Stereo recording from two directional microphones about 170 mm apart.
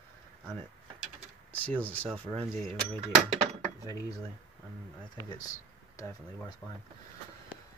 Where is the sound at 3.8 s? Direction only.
20° left (ahead or behind).